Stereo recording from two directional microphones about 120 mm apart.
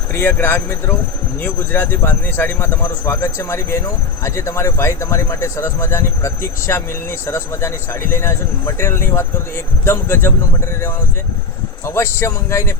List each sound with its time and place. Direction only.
0.1 s speech: 15° left (ahead or behind)
11.9 s speech: 20° left (ahead or behind)